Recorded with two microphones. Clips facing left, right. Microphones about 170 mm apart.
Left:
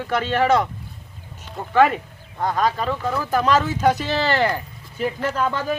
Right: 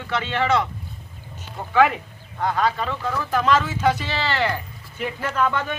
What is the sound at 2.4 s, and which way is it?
Speech, 40° left (ahead or behind).